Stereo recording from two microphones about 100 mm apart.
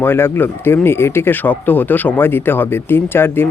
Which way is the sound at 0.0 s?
20° left (ahead or behind).